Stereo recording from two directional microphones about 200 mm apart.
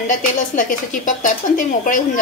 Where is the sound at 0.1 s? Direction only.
40° left (ahead or behind).